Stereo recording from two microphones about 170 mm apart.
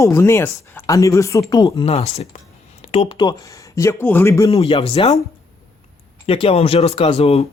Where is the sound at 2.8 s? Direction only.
35° left (ahead or behind).